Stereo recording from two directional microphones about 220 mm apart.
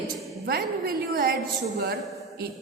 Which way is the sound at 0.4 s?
45° right (ahead or behind).